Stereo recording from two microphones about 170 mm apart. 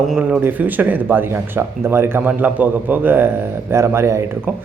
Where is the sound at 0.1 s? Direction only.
5° right (ahead or behind).